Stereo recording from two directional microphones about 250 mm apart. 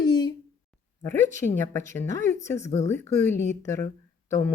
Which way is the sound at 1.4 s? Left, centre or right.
Left.